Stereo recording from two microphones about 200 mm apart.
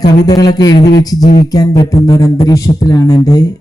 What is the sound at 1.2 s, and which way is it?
Speech, 40° left (ahead or behind).